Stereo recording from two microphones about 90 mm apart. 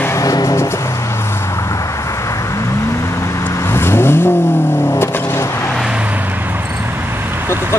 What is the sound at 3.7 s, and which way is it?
Vehicle, 25° left (ahead or behind).